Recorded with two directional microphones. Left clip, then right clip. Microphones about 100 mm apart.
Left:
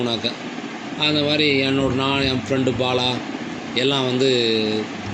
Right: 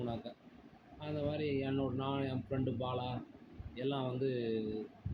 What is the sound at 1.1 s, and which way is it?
Speech, 65° left (ahead or behind).